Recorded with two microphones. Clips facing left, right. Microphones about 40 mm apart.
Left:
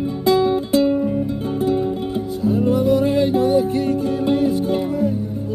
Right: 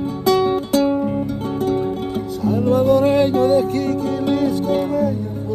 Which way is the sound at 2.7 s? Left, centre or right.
Right.